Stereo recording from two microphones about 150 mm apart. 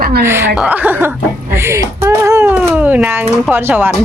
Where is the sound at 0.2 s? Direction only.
15° right (ahead or behind).